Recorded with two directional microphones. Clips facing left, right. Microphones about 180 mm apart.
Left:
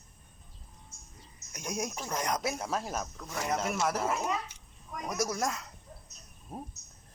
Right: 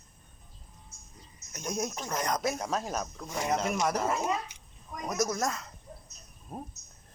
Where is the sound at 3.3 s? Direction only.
15° right (ahead or behind).